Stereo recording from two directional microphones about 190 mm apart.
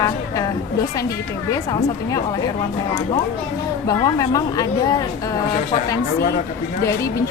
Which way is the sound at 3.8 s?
20° left (ahead or behind).